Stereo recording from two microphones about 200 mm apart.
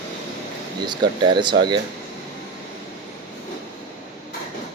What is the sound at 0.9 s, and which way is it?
Speech, 25° right (ahead or behind).